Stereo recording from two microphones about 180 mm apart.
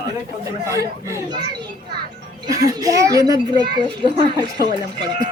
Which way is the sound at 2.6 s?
20° right (ahead or behind).